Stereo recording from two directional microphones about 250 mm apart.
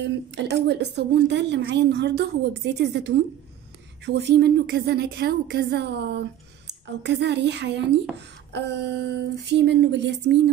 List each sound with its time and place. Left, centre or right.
0.0 s a woman's voice: right